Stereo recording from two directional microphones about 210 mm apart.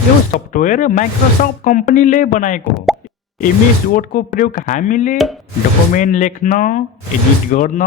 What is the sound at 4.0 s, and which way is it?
Speech, 40° left (ahead or behind).